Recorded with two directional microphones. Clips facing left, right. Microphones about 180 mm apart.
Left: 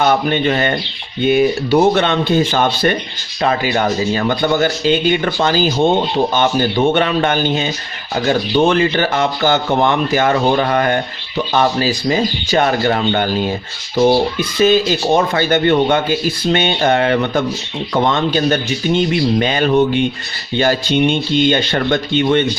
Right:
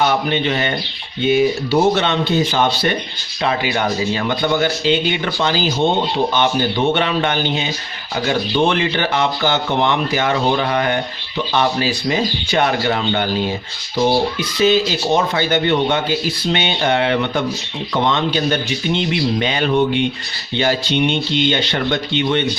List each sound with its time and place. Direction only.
0.0 s speech: 50° left (ahead or behind)
14.6 s speech: 50° left (ahead or behind)